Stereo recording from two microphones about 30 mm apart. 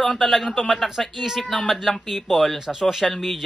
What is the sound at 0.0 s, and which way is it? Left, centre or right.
Speech, centre.